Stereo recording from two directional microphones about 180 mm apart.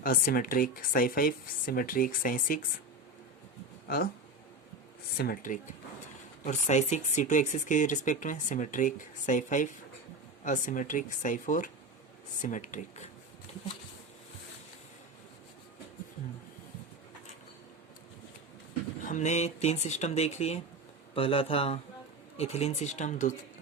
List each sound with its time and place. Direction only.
0.0 s speech: 50° left (ahead or behind)
3.8 s speech: 60° left (ahead or behind)
5.1 s speech: 60° left (ahead or behind)
6.4 s speech: 40° left (ahead or behind)
19.0 s speech: 40° left (ahead or behind)